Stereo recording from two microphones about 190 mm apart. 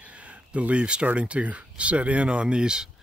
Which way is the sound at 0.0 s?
5° right (ahead or behind).